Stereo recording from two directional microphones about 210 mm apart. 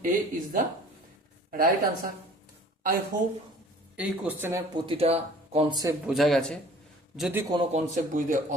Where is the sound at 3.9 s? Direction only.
5° right (ahead or behind).